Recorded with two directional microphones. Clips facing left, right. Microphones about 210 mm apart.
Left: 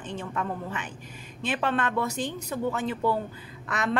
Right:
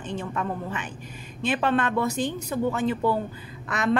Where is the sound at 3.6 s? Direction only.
15° right (ahead or behind).